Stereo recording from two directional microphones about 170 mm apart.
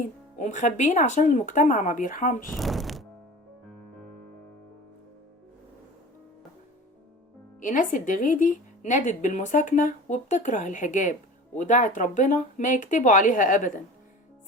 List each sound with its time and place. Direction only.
0.3 s speech: 45° left (ahead or behind)
2.5 s music: centre (ahead or behind)
7.6 s speech: 50° left (ahead or behind)